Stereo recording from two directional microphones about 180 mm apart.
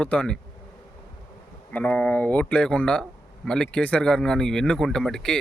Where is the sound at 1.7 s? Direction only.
10° left (ahead or behind).